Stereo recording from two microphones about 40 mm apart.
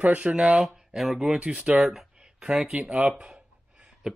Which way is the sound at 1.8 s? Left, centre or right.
Centre.